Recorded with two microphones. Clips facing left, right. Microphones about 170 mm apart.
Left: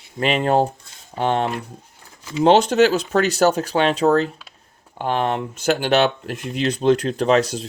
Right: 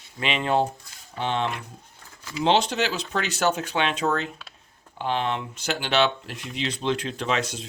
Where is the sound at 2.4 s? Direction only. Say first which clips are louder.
Left 8 dB; 45° left (ahead or behind).